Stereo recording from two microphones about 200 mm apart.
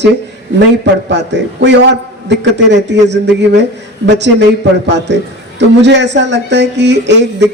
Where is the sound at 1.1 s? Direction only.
60° right (ahead or behind).